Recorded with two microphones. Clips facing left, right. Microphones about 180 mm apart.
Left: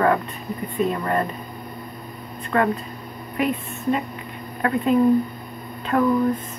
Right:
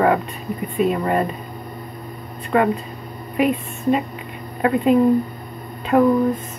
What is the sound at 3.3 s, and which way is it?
Speech, 20° right (ahead or behind).